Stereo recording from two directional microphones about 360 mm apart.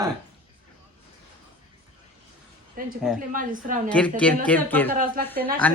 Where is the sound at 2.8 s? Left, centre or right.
Right.